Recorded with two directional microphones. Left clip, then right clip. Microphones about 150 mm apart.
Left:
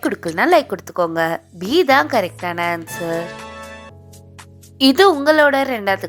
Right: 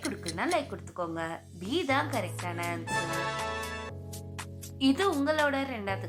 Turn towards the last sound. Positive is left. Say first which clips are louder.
# left 15 dB
turn(degrees=60)  # may be behind; listen again after turning